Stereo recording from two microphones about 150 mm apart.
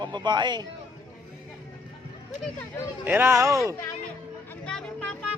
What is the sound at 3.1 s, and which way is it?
Speech, 15° right (ahead or behind).